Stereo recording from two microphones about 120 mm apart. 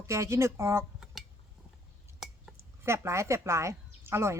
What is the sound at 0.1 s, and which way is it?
Speech, 25° right (ahead or behind).